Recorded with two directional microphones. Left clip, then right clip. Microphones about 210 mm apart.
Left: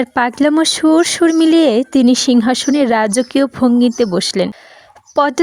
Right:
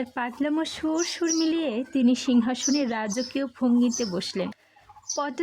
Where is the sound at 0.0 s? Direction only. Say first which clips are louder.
Left 15 dB; 45° left (ahead or behind).